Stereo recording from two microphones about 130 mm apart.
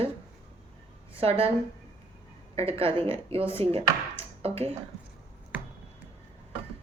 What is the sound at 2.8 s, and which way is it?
Speech, 45° right (ahead or behind).